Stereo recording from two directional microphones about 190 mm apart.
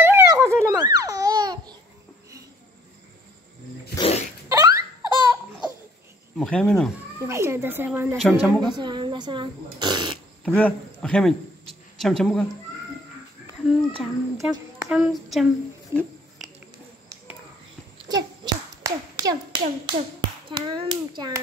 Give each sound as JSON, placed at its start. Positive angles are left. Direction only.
{"t": 0.0, "sound": "babbling", "side_deg": -15}
{"t": 4.5, "sound": "baby laughter", "side_deg": -15}
{"t": 6.3, "sound": "speech", "side_deg": 5}
{"t": 7.2, "sound": "a child's voice", "side_deg": -15}
{"t": 8.2, "sound": "speech", "side_deg": 5}
{"t": 8.5, "sound": "a child's voice", "side_deg": -25}
{"t": 10.4, "sound": "speech", "side_deg": 5}
{"t": 13.7, "sound": "speech", "side_deg": 0}
{"t": 18.0, "sound": "clapping", "side_deg": -20}
{"t": 20.4, "sound": "a child's voice", "side_deg": -25}